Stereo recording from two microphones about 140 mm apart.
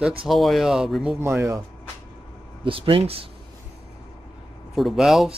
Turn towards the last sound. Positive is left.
turn(degrees=-5)  # may be behind; listen again after turning